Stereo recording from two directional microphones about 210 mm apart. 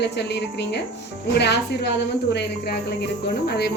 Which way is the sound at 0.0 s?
55° left (ahead or behind).